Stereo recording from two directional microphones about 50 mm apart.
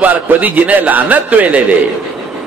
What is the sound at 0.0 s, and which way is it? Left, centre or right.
A man's voice, right.